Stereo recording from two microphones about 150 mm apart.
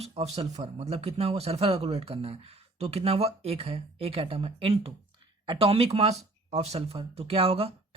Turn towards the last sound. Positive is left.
turn(degrees=-40)  # may be behind; listen again after turning